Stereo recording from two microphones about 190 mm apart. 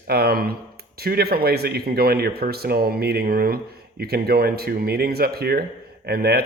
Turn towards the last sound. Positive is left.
turn(degrees=-55)  # may be behind; listen again after turning